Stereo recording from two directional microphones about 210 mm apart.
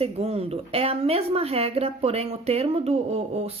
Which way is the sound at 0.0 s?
30° right (ahead or behind).